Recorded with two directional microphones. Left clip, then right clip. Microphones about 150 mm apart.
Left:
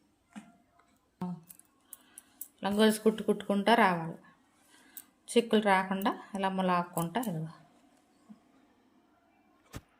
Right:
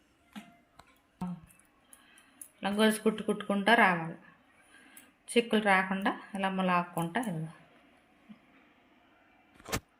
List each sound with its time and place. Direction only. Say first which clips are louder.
2.6 s speech: left 1 dB; 25° left (ahead or behind)
5.2 s speech: left 1 dB; 25° left (ahead or behind)